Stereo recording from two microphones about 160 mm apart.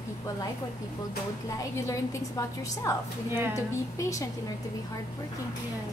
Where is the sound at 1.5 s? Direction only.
20° left (ahead or behind).